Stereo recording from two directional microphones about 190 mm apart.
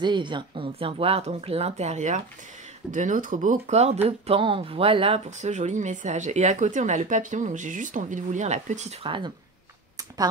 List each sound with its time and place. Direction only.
0.0 s speech: 25° right (ahead or behind)